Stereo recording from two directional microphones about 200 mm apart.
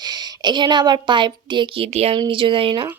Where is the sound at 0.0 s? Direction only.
20° right (ahead or behind).